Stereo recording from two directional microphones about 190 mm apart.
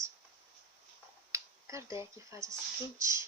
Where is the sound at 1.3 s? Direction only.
15° right (ahead or behind).